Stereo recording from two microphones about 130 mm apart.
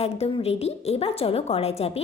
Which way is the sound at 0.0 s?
45° left (ahead or behind).